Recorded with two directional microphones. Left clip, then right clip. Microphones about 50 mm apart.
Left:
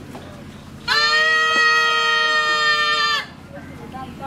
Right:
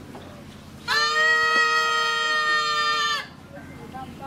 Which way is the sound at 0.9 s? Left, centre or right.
Centre.